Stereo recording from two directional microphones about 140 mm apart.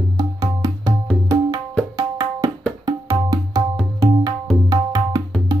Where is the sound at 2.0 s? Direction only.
25° right (ahead or behind).